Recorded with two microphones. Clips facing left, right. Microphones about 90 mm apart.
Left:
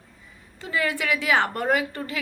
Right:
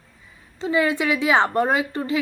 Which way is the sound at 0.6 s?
20° right (ahead or behind).